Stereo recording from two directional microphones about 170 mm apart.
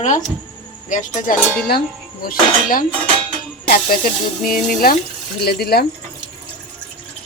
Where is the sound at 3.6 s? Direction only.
60° left (ahead or behind).